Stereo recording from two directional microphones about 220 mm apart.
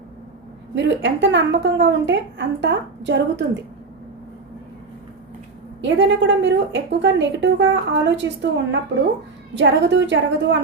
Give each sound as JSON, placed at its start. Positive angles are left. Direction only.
{"t": 0.8, "sound": "a woman's voice", "side_deg": -55}
{"t": 5.8, "sound": "a woman's voice", "side_deg": -55}